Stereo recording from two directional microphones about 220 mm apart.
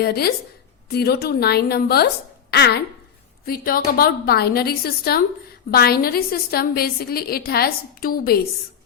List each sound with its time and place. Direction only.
0.0 s a woman's voice: 45° left (ahead or behind)